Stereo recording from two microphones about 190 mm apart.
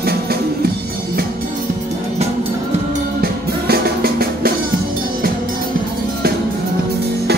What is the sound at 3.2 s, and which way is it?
Music, 55° right (ahead or behind).